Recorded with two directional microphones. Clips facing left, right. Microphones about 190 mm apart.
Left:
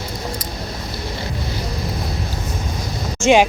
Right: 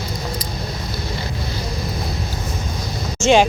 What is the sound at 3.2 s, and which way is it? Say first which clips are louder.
Speech: left 1 dB; 10° left (ahead or behind).